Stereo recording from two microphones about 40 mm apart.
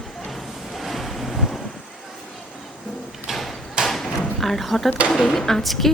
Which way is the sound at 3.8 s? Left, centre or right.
Centre.